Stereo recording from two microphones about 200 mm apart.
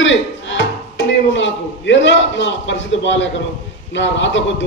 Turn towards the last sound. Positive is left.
turn(degrees=65)  # may be behind; listen again after turning